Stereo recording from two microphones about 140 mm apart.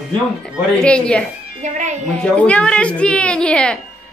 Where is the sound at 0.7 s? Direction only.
5° left (ahead or behind).